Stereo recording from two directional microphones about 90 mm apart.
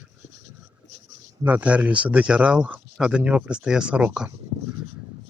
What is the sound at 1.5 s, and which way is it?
Speech, 15° right (ahead or behind).